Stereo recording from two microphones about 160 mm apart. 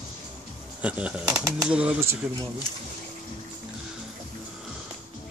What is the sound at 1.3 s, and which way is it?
Speech, 20° right (ahead or behind).